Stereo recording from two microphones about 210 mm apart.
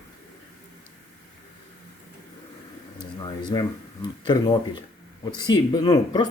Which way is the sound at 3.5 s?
20° left (ahead or behind).